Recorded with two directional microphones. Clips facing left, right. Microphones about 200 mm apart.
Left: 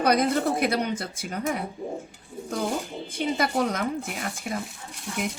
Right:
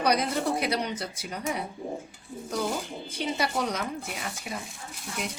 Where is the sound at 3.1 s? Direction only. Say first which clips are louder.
Left 4 dB; 50° left (ahead or behind).